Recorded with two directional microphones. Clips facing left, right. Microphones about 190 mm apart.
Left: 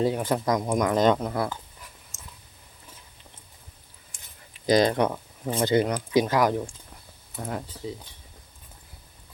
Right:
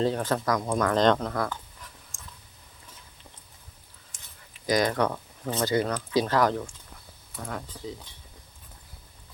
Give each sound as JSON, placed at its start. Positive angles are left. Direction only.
{"t": 0.0, "sound": "speech", "side_deg": 10}
{"t": 2.1, "sound": "a sound", "side_deg": 0}
{"t": 4.6, "sound": "speech", "side_deg": 25}
{"t": 7.3, "sound": "speech", "side_deg": 25}